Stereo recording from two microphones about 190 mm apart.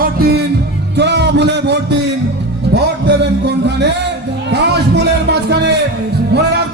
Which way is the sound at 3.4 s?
65° right (ahead or behind).